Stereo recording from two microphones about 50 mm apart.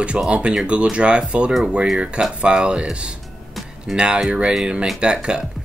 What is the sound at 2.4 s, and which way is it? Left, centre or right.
Speech, right.